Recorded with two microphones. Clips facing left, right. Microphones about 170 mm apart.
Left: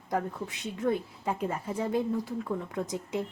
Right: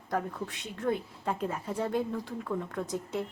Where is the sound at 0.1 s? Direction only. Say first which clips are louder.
Left 1 dB; 10° left (ahead or behind).